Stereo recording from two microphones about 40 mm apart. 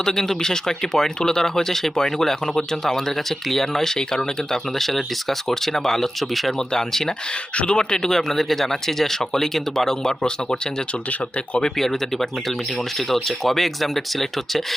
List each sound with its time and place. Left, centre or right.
0.0 s speech: centre
7.5 s speech: left
11.6 s speech: centre